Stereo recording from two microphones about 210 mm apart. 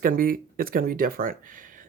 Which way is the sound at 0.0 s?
45° right (ahead or behind).